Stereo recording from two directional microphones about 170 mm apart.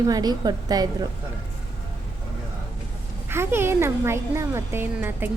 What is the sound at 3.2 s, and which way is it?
Speech, 15° right (ahead or behind).